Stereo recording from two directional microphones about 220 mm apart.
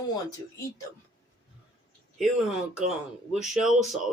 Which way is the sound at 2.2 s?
Centre (ahead or behind).